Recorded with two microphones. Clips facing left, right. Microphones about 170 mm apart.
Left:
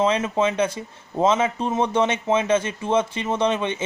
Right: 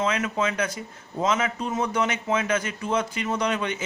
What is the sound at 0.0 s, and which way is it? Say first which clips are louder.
Speech: left 5 dB; 30° left (ahead or behind).